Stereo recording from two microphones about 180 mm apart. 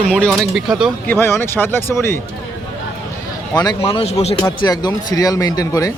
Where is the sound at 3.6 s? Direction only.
25° left (ahead or behind).